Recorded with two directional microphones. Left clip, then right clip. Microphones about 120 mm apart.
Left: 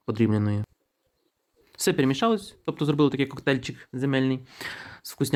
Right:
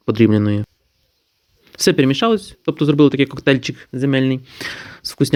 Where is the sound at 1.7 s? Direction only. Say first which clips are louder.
Right 9 dB; 35° right (ahead or behind).